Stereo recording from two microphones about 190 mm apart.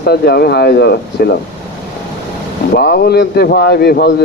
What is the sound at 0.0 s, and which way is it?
Speech, 55° left (ahead or behind).